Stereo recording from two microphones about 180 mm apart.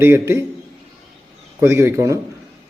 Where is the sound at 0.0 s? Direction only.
15° right (ahead or behind).